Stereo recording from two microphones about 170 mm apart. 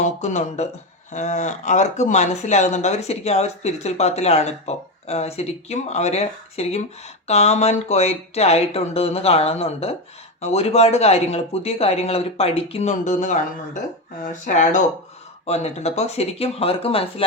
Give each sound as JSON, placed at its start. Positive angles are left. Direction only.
{"t": 0.0, "sound": "speech", "side_deg": 45}
{"t": 14.4, "sound": "speech", "side_deg": 45}